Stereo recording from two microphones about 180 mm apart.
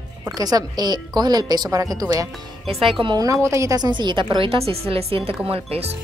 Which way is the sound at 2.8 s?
30° right (ahead or behind).